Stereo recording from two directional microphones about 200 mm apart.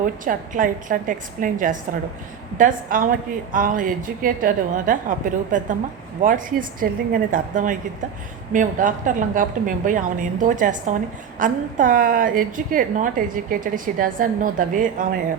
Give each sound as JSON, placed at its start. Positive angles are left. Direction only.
{"t": 0.0, "sound": "a woman's voice", "side_deg": -40}